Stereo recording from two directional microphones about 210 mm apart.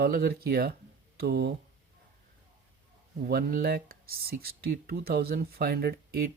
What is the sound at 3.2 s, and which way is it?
Speech, 45° right (ahead or behind).